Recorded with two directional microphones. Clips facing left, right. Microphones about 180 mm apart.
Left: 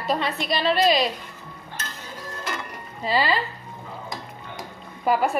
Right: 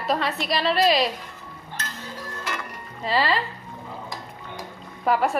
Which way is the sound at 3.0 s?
Centre (ahead or behind).